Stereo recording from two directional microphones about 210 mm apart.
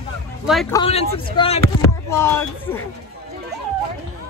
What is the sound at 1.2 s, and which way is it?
Speech, 25° left (ahead or behind).